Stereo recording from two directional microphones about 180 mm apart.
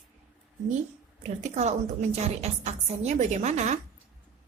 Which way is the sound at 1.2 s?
40° right (ahead or behind).